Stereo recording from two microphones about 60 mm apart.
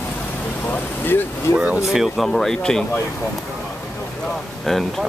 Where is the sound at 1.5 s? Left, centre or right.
Centre.